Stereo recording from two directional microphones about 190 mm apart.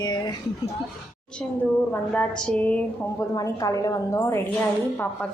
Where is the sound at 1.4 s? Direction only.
5° left (ahead or behind).